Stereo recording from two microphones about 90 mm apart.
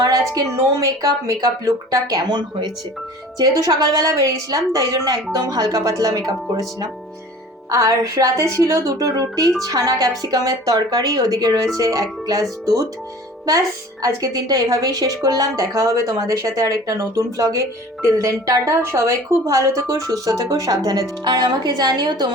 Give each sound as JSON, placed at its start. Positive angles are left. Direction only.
{"t": 0.0, "sound": "a sound", "side_deg": -45}
{"t": 0.5, "sound": "a woman's voice", "side_deg": -35}
{"t": 2.2, "sound": "a woman's voice", "side_deg": -55}
{"t": 3.3, "sound": "a woman's voice", "side_deg": -40}